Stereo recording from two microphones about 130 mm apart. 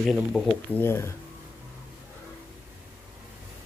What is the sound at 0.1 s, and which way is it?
Speech, 5° right (ahead or behind).